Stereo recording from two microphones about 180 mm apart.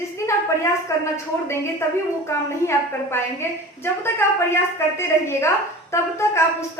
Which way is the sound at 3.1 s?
15° left (ahead or behind).